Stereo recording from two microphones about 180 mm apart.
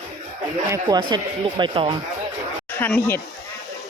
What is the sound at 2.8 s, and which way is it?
Speech, 10° left (ahead or behind).